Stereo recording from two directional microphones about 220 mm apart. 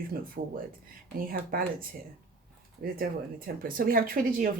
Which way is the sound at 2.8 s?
40° right (ahead or behind).